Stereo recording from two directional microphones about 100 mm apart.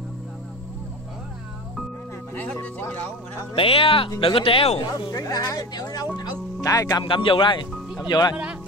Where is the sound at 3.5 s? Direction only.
65° left (ahead or behind).